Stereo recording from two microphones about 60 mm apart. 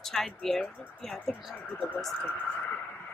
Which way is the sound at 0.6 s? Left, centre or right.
Centre.